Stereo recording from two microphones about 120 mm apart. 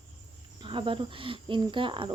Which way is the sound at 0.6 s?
45° right (ahead or behind).